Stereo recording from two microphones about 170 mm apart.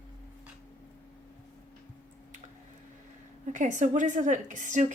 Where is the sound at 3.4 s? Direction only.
45° right (ahead or behind).